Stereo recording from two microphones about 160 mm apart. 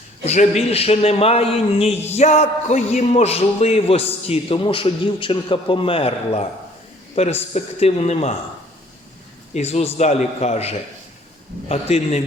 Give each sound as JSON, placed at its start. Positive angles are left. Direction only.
{"t": 0.6, "sound": "a man's voice", "side_deg": 40}
{"t": 9.6, "sound": "a man's voice", "side_deg": 40}